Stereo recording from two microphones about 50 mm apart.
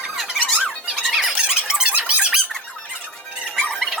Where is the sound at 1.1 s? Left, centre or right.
Centre.